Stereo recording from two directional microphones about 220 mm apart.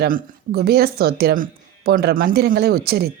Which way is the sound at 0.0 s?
45° right (ahead or behind).